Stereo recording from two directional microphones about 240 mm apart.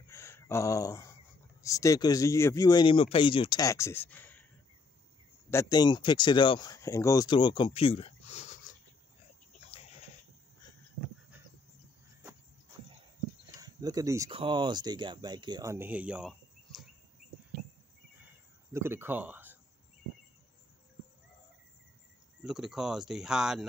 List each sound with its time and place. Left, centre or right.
0.1 s a sound: centre
1.6 s speech: centre
5.5 s speech: centre
9.7 s a sound: left
13.6 s speech: centre
18.7 s speech: centre
22.4 s speech: centre